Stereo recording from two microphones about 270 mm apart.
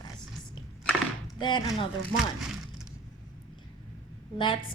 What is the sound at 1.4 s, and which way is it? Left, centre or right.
Speech, centre.